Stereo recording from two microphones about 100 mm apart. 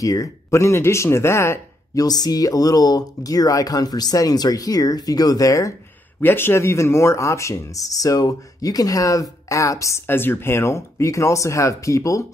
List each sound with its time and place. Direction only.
0.0 s speech: 35° left (ahead or behind)
2.0 s speech: 40° left (ahead or behind)
6.2 s speech: 20° left (ahead or behind)